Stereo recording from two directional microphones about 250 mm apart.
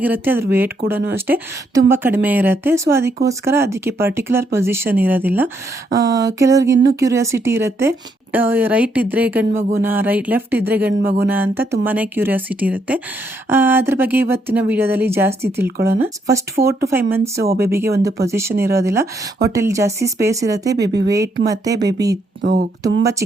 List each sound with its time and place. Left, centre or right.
0.0 s speech: centre
22.4 s speech: right